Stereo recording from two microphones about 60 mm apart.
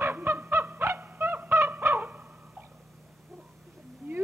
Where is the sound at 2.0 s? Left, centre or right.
Right.